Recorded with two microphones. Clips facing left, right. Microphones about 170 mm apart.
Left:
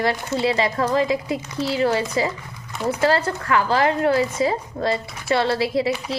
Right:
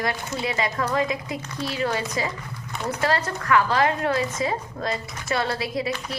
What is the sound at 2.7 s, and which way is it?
Speech, 5° left (ahead or behind).